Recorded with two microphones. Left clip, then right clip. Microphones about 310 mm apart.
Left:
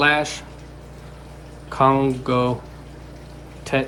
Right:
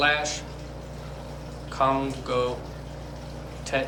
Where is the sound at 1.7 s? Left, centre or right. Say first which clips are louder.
Left 7 dB; centre.